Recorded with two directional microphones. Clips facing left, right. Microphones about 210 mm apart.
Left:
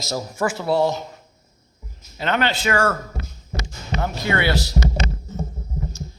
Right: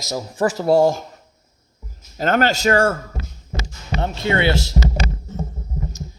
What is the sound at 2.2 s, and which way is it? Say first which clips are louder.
Speech: right 4 dB; 45° right (ahead or behind).